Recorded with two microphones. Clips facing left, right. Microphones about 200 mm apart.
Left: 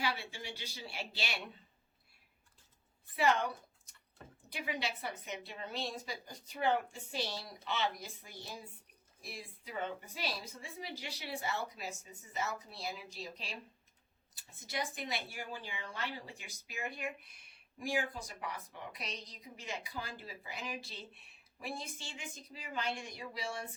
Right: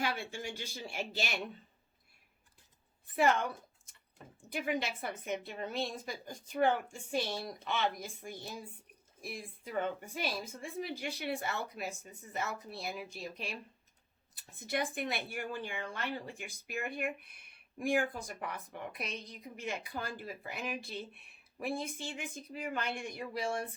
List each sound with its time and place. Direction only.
0.0 s a woman's voice: 50° right (ahead or behind)
3.2 s a woman's voice: 50° right (ahead or behind)